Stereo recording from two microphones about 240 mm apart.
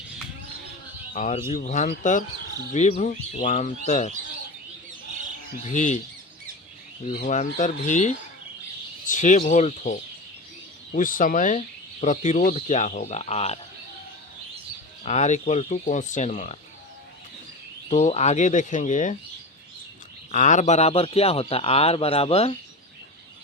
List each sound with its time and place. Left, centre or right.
1.1 s speech: left
5.6 s speech: left
7.0 s speech: left
15.0 s speech: left
17.8 s speech: left
20.3 s speech: left